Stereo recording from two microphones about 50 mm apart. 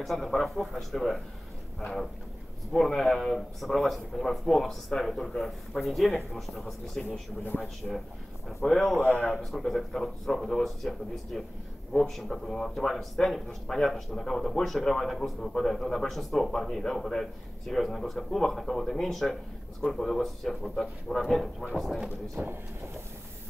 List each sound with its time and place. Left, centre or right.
0.0 s speech: centre
2.9 s speech: centre
7.1 s speech: left
7.8 s speech: centre
9.1 s a man's voice: left
9.4 s speech: centre
22.4 s speech: right